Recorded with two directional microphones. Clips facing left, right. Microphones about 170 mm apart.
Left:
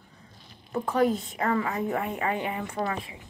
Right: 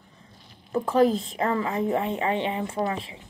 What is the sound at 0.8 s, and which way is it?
Speech, 35° right (ahead or behind).